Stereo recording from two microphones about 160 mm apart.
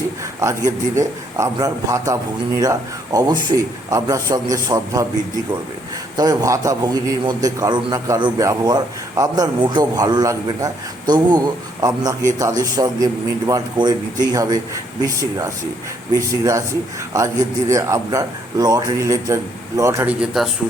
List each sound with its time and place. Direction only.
0.4 s a man's voice: 20° right (ahead or behind)
6.1 s a man's voice: 20° right (ahead or behind)
20.4 s speech: 5° right (ahead or behind)